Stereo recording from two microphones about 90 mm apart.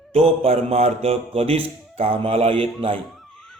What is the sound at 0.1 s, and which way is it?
Speech, 90° right.